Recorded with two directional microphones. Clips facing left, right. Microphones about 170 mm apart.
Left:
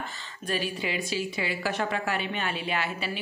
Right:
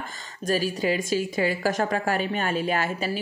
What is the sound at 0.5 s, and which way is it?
Speech, 40° right (ahead or behind).